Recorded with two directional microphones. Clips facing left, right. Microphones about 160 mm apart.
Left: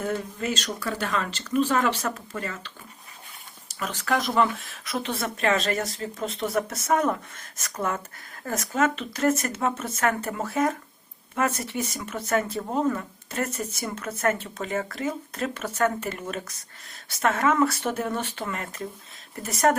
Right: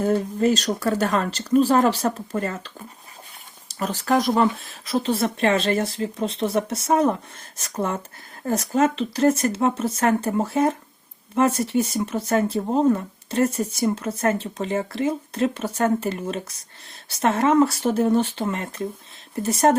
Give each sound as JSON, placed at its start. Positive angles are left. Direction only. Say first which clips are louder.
{"t": 0.0, "sound": "speech", "louder": "right 9 dB", "side_deg": -35}